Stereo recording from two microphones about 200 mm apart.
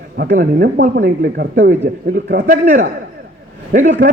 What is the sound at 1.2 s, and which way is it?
Speech, 65° right (ahead or behind).